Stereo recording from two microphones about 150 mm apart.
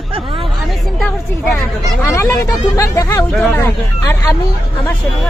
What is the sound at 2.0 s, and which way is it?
Speech, 20° left (ahead or behind).